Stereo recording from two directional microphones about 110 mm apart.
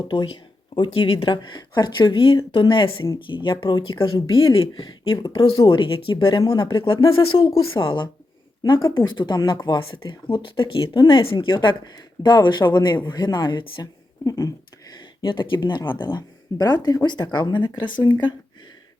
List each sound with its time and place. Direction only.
0.8 s speech: 55° left (ahead or behind)
4.5 s speech: 50° left (ahead or behind)
14.3 s speech: 30° left (ahead or behind)
15.2 s speech: 45° left (ahead or behind)